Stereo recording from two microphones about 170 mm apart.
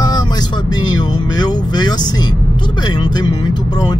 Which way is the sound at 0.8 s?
25° left (ahead or behind).